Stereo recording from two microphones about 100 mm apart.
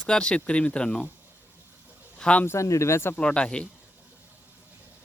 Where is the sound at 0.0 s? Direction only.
10° left (ahead or behind).